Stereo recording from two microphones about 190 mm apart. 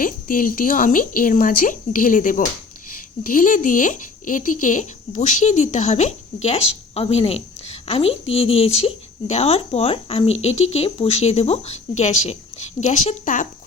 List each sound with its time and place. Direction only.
0.0 s speech: 45° left (ahead or behind)